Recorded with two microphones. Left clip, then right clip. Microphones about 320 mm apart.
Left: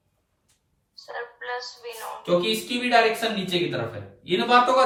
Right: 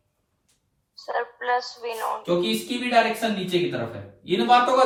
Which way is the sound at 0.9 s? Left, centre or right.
Centre.